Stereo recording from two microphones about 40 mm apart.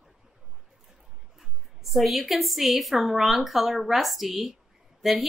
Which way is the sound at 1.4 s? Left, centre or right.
Centre.